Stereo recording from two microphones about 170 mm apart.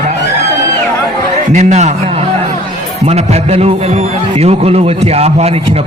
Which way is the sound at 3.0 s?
40° right (ahead or behind).